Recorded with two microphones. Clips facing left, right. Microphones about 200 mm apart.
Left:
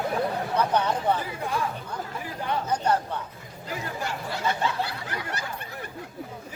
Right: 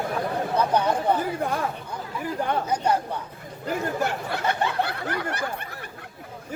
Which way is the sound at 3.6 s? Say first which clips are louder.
Right 7 dB; 55° right (ahead or behind).